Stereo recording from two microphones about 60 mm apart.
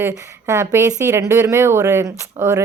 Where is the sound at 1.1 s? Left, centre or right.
Right.